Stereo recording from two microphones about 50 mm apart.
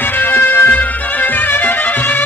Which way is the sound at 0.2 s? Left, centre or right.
Left.